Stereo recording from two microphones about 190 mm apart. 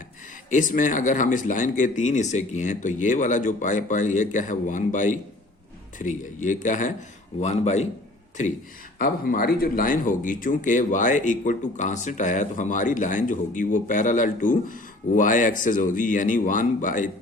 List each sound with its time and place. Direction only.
0.5 s a man's voice: 45° left (ahead or behind)
9.0 s speech: 50° left (ahead or behind)